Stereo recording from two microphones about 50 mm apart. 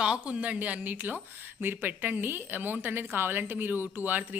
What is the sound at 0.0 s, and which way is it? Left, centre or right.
A woman's voice, centre.